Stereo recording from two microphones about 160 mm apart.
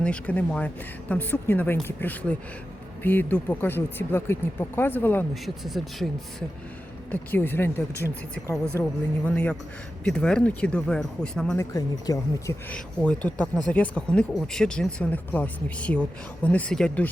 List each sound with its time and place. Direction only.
0.0 s speech: 10° left (ahead or behind)
5.3 s speech: centre (ahead or behind)
7.1 s speech: 10° left (ahead or behind)
8.4 s speech: centre (ahead or behind)
11.5 s speech: 20° left (ahead or behind)
12.7 s speech: 5° left (ahead or behind)